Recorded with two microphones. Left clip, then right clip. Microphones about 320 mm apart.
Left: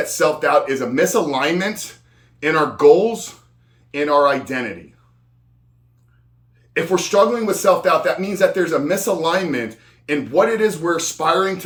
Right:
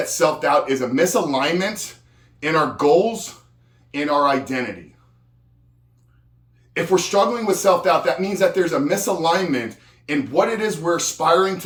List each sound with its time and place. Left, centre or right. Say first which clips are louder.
0.0 s speech: left 1 dB; centre
3.9 s speech: left 3 dB; centre
6.7 s speech: left 2 dB; centre